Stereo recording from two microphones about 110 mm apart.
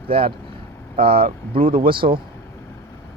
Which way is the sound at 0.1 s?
55° right (ahead or behind).